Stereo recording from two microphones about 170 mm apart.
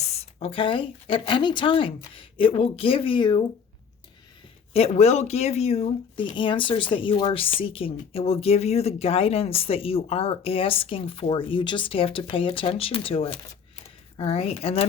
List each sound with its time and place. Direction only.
0.0 s speech: 40° left (ahead or behind)
4.7 s speech: 35° left (ahead or behind)